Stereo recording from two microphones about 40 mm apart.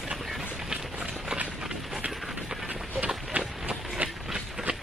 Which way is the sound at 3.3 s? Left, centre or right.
Right.